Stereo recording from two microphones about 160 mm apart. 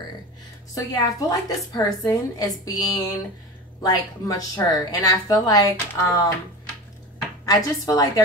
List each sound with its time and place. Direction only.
0.7 s a woman's voice: 20° left (ahead or behind)
7.4 s a woman's voice: 20° left (ahead or behind)